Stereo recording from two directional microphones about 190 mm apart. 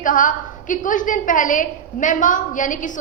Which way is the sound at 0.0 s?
45° left (ahead or behind).